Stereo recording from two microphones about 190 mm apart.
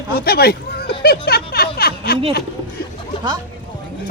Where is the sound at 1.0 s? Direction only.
55° left (ahead or behind).